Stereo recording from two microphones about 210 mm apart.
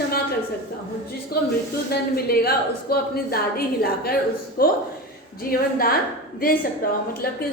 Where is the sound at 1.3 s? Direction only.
45° left (ahead or behind).